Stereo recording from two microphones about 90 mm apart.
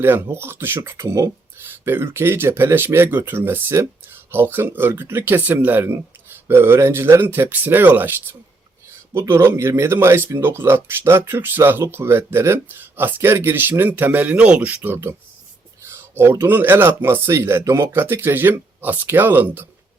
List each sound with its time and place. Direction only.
0.0 s speech: 25° right (ahead or behind)